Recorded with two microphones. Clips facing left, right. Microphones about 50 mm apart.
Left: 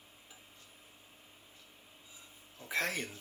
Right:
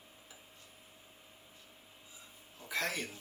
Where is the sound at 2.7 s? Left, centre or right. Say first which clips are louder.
Left 1 dB; left.